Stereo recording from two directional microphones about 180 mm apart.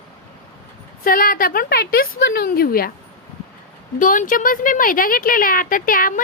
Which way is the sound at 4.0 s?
50° left (ahead or behind).